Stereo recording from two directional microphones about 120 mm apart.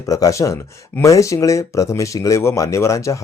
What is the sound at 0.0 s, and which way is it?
Speech, 30° left (ahead or behind).